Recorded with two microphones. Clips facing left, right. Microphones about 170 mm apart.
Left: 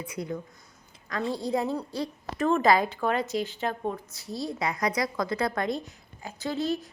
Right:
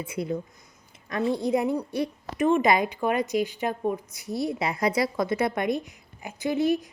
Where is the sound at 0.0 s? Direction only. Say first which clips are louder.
Right 4 dB; 25° right (ahead or behind).